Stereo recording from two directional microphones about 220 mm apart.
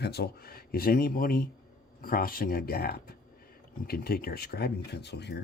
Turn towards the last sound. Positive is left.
turn(degrees=50)  # may be behind; listen again after turning